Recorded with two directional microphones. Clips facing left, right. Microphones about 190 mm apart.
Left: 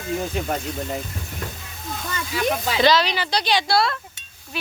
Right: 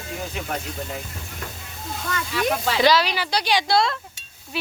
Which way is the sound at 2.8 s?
10° right (ahead or behind).